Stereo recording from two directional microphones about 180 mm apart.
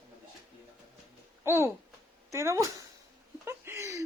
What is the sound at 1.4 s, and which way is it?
Speech, 15° right (ahead or behind).